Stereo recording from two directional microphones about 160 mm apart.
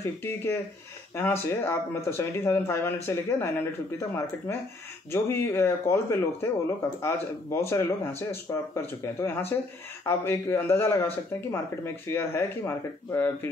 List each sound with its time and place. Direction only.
0.0 s speech: 15° left (ahead or behind)